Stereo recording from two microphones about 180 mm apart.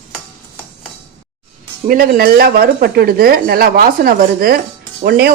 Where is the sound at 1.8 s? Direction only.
50° right (ahead or behind).